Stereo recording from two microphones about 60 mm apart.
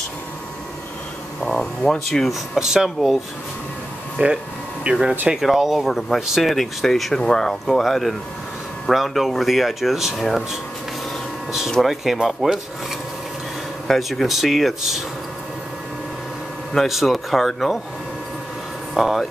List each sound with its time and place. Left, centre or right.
1.4 s speech: centre
2.2 s speech: centre
4.2 s speech: right
5.3 s speech: centre
11.8 s speech: centre
13.8 s speech: centre
16.7 s speech: centre
18.9 s speech: centre